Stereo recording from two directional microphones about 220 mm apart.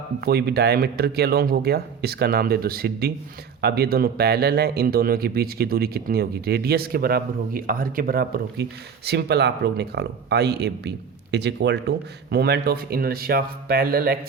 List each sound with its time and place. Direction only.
0.2 s speech: 45° right (ahead or behind)